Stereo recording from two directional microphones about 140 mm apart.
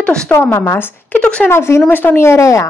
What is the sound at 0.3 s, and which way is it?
Speech, 15° left (ahead or behind).